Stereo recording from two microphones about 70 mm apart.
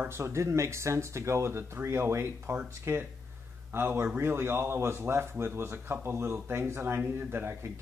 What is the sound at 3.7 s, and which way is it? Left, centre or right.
Speech, right.